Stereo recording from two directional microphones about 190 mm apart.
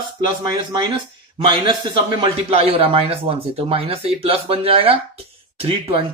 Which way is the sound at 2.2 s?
30° right (ahead or behind).